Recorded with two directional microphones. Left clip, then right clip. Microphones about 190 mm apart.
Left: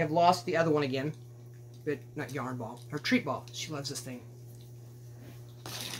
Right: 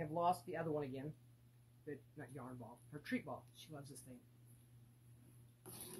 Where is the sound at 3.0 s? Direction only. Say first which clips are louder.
Left 16 dB; 10° left (ahead or behind).